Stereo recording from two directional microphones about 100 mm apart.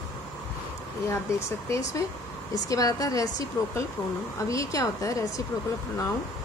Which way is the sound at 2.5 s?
35° left (ahead or behind).